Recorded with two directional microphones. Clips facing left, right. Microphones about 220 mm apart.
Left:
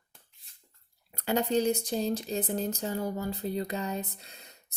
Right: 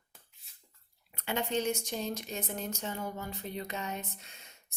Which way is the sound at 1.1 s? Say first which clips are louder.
Left 6 dB; 40° left (ahead or behind).